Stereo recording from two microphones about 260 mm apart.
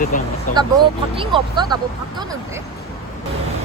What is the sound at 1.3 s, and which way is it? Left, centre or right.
Speech, centre.